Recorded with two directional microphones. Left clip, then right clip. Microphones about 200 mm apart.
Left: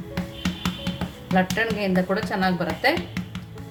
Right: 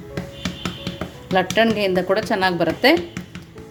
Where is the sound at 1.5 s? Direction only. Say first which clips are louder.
Right 6 dB; 40° right (ahead or behind).